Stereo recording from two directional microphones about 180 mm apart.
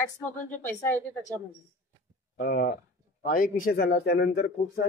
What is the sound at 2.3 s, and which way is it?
Speech, 55° left (ahead or behind).